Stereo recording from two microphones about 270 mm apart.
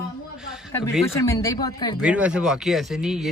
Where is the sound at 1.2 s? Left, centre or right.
Centre.